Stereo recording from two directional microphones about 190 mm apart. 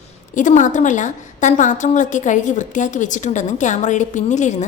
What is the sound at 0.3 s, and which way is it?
A woman's voice, 40° left (ahead or behind).